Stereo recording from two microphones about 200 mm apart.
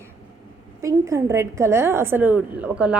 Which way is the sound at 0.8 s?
15° right (ahead or behind).